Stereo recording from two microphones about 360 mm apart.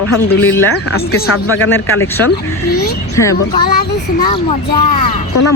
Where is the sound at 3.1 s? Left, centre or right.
Centre.